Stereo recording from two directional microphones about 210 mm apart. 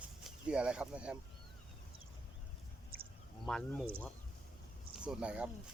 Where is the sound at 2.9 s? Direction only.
45° right (ahead or behind).